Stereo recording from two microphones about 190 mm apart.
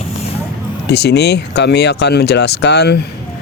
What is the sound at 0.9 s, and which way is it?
Speech, 60° left (ahead or behind).